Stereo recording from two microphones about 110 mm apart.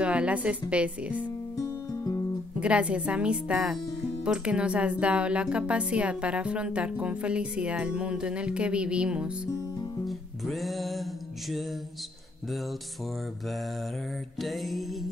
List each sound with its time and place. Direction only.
0.0 s speech: 10° right (ahead or behind)
1.6 s music: 30° left (ahead or behind)
2.6 s speech: 10° right (ahead or behind)
10.0 s music: centre (ahead or behind)
14.4 s music: centre (ahead or behind)